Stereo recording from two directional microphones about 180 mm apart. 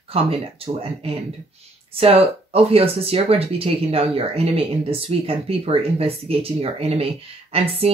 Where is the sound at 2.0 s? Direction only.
30° right (ahead or behind).